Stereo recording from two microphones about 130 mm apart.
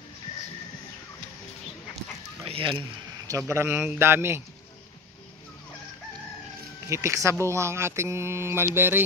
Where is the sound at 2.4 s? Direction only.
45° right (ahead or behind).